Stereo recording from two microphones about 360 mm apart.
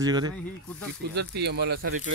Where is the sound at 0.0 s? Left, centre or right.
Centre.